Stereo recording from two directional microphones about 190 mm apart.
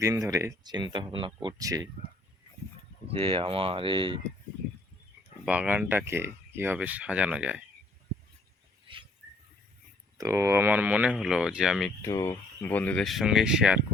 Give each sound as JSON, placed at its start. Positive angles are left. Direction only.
{"t": 0.0, "sound": "speech", "side_deg": -20}
{"t": 3.1, "sound": "speech", "side_deg": -30}
{"t": 5.5, "sound": "speech", "side_deg": -10}
{"t": 10.2, "sound": "speech", "side_deg": -15}
{"t": 12.0, "sound": "speech", "side_deg": 15}